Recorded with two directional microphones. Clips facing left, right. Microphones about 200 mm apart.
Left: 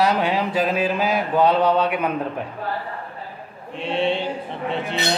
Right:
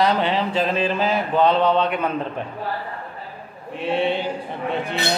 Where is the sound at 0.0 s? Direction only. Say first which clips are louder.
Even; 10° left (ahead or behind).